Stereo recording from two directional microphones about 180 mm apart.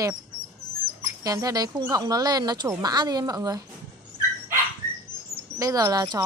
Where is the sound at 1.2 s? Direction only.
20° right (ahead or behind).